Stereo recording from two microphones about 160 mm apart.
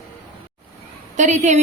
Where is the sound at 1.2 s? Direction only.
45° right (ahead or behind).